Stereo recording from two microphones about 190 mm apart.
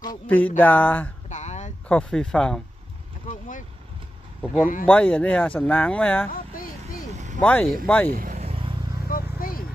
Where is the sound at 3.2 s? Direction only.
40° left (ahead or behind).